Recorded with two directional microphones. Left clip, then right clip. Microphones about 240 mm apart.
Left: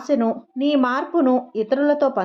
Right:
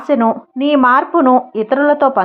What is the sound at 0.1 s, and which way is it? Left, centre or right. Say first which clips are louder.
A woman's voice: right 7 dB; centre.